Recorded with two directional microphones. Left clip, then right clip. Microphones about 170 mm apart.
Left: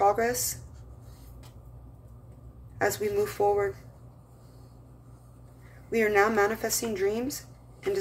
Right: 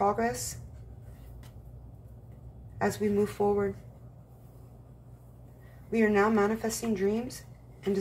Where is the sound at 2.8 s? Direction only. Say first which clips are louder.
Left 2 dB; 35° left (ahead or behind).